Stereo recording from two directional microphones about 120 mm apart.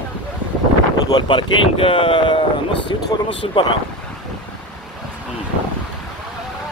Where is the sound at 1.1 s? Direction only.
45° left (ahead or behind).